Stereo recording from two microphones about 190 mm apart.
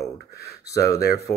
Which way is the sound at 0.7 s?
15° left (ahead or behind).